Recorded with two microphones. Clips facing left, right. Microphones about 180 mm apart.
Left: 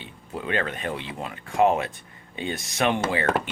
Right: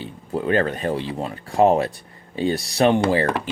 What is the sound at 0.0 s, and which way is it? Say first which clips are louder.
Speech: right 8 dB; 40° right (ahead or behind).